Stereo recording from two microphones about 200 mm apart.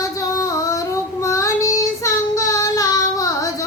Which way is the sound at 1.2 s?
15° left (ahead or behind).